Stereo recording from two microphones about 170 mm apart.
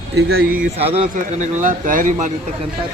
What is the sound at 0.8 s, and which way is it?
Speech, 35° right (ahead or behind).